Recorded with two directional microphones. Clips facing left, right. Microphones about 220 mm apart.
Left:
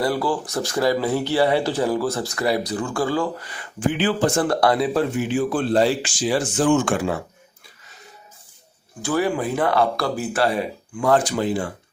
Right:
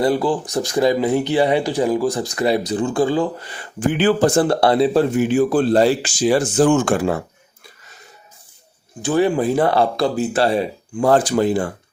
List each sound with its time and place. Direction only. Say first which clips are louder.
0.0 s speech: right 4 dB; 20° right (ahead or behind)
3.8 s speech: right 5 dB; 45° right (ahead or behind)
4.4 s speech: right 4 dB; 25° right (ahead or behind)
5.3 s speech: right 4 dB; 40° right (ahead or behind)
9.0 s speech: right 5 dB; 20° right (ahead or behind); by 11.7 s 45° right (ahead or behind)